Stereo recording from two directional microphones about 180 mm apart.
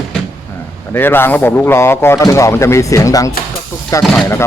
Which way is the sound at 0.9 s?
10° left (ahead or behind).